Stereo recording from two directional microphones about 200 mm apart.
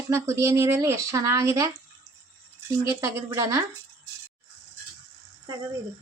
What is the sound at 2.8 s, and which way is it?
Speech, 15° right (ahead or behind).